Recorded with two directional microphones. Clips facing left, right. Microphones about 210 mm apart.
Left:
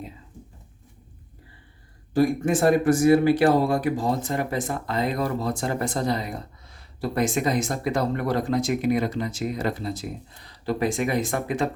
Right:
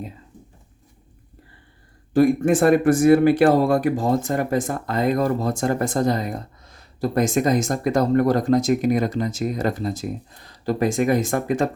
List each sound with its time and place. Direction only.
2.1 s speech: 55° right (ahead or behind)